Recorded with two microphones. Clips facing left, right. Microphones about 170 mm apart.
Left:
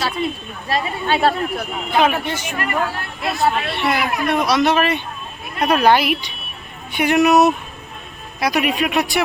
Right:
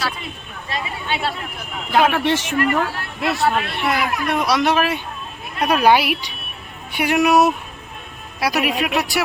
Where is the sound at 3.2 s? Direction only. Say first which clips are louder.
Even; 70° right (ahead or behind).